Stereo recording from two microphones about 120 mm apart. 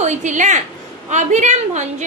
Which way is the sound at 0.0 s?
80° right.